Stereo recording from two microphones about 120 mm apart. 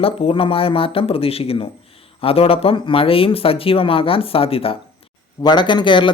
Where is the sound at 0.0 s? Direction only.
50° left (ahead or behind).